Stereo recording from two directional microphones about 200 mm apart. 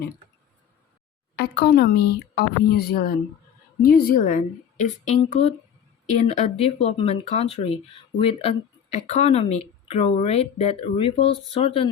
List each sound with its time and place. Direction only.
1.4 s a woman's voice: 55° left (ahead or behind); by 11.9 s 30° left (ahead or behind)